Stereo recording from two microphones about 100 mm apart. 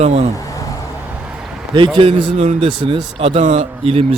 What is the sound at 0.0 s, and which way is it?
Speech, 90° right.